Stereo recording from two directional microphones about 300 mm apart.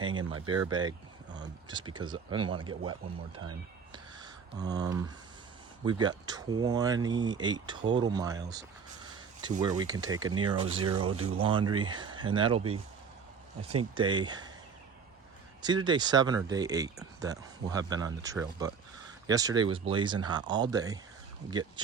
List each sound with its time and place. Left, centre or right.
0.2 s speech: right
0.7 s speech: centre
3.3 s speech: right
3.9 s a sound: centre
5.8 s speech: centre
13.9 s speech: centre
15.6 s speech: centre